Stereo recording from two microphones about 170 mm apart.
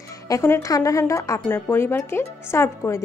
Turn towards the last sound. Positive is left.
turn(degrees=15)  # may be behind; listen again after turning